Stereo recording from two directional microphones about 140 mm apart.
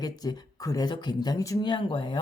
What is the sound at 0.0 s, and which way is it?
Speech, 30° left (ahead or behind).